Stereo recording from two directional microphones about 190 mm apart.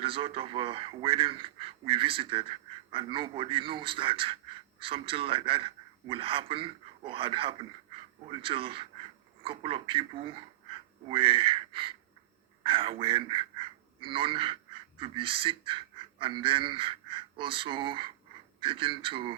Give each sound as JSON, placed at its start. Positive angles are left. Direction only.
{"t": 0.0, "sound": "a man's voice", "side_deg": -30}